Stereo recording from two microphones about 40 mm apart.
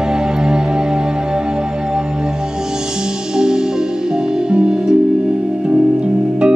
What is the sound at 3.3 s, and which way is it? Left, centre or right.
Music, centre.